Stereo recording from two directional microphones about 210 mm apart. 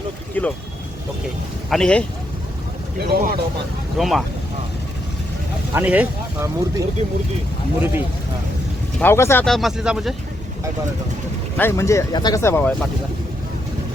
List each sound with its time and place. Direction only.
0.4 s speech: 10° left (ahead or behind)
1.7 s speech: 5° left (ahead or behind)
3.0 s speech: 45° right (ahead or behind)
3.9 s speech: centre (ahead or behind)
5.7 s speech: 10° right (ahead or behind)
9.0 s speech: 10° left (ahead or behind)
11.5 s speech: 10° left (ahead or behind)